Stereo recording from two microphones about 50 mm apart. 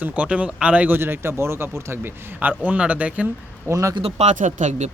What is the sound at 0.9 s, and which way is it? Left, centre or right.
Speech, right.